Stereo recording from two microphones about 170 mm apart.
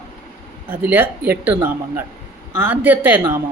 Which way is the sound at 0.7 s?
10° right (ahead or behind).